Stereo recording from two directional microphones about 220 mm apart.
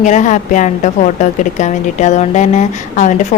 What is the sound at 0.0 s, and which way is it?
Speech, 35° left (ahead or behind).